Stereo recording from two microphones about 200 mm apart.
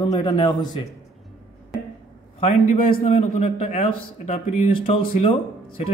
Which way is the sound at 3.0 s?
30° left (ahead or behind).